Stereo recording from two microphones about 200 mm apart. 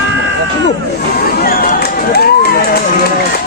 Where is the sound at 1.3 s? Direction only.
50° left (ahead or behind).